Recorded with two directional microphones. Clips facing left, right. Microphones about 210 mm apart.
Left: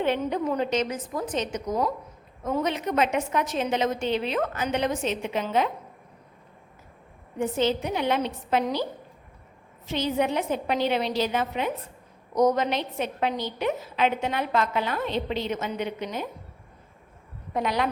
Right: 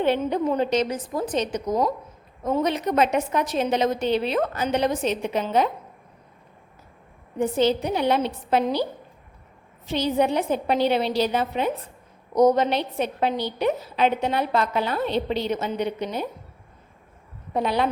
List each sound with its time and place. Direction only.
0.0 s a woman's voice: 35° right (ahead or behind)
7.3 s a woman's voice: 35° right (ahead or behind)
9.8 s a woman's voice: 35° right (ahead or behind)
17.5 s a woman's voice: 30° right (ahead or behind)